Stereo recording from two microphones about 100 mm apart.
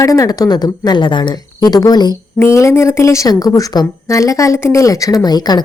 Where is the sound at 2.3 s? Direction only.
25° left (ahead or behind).